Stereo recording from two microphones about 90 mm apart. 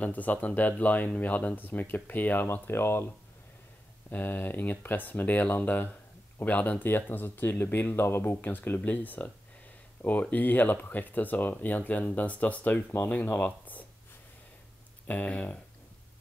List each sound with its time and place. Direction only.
0.0 s speech: 20° left (ahead or behind)
15.0 s speech: 15° left (ahead or behind)